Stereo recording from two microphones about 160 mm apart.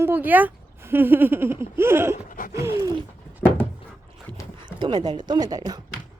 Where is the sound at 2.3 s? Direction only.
55° left (ahead or behind).